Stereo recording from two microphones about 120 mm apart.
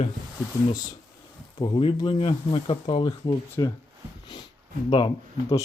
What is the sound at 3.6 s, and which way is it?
Speech, 30° left (ahead or behind).